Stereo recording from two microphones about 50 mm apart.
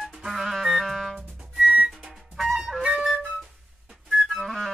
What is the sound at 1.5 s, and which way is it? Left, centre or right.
Music, centre.